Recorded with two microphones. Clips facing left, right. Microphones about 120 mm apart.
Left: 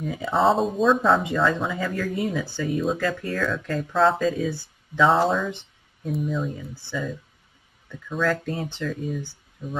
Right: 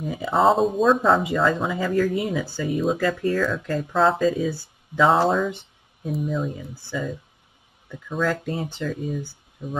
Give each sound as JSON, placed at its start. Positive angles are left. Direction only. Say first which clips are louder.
{"t": 0.0, "sound": "speech", "louder": "right 2 dB", "side_deg": -5}
{"t": 9.6, "sound": "speech", "louder": "right 2 dB", "side_deg": -20}